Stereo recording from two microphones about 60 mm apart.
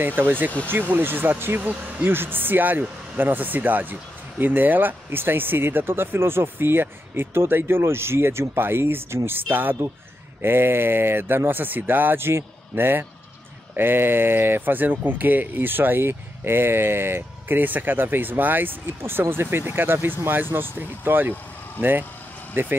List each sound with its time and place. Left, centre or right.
0.0 s speech: right
1.6 s speech: right
2.0 s speech: right
22.5 s speech: right